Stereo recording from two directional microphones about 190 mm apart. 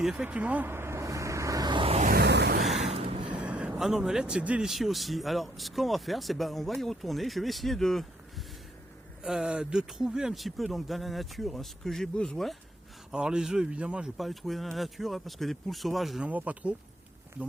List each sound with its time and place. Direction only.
0.0 s vehicle: 5° right (ahead or behind); by 2.0 s 30° right (ahead or behind)
2.0 s a sound: 60° right (ahead or behind)
2.7 s gasp: 35° right (ahead or behind)
3.4 s speech: 5° right (ahead or behind)
9.2 s speech: 5° right (ahead or behind)